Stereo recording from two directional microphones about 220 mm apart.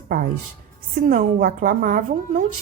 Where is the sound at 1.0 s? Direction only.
40° right (ahead or behind).